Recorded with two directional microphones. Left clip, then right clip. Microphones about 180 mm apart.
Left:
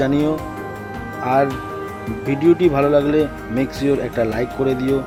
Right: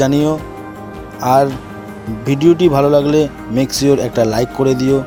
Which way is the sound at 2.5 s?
30° right (ahead or behind).